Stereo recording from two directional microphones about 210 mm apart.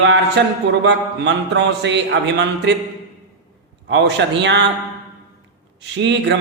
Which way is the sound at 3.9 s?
60° right (ahead or behind).